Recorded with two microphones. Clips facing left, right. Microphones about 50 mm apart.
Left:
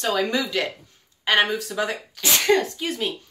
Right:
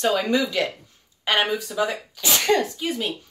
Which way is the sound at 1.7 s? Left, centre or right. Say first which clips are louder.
Right 1 dB; centre.